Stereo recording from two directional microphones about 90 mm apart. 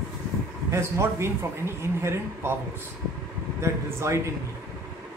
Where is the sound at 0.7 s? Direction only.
30° right (ahead or behind).